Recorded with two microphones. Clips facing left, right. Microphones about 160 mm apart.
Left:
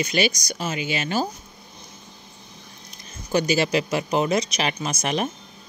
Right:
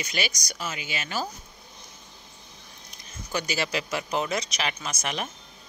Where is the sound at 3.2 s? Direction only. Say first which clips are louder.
Left 8 dB; 25° left (ahead or behind).